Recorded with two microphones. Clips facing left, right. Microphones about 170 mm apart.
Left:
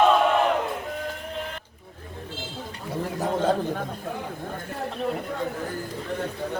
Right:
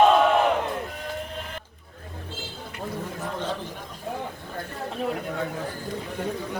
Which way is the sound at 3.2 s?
50° left (ahead or behind).